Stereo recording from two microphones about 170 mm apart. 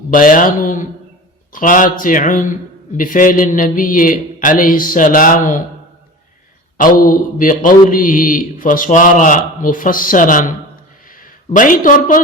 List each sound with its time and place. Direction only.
0.1 s a man's voice: 55° left (ahead or behind)
6.7 s a man's voice: 55° left (ahead or behind)